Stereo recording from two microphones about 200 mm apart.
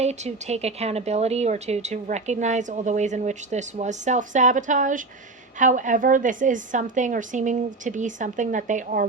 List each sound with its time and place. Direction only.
0.0 s speech: 35° right (ahead or behind)